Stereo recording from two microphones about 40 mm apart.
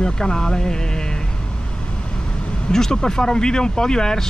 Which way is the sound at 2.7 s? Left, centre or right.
Centre.